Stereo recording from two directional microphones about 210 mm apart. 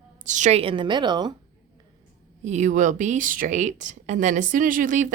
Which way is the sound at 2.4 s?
35° right (ahead or behind).